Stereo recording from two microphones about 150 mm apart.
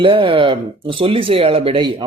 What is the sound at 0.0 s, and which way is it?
A man's voice, 35° right (ahead or behind).